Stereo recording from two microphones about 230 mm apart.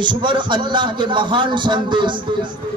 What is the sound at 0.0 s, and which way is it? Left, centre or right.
A man's voice, right.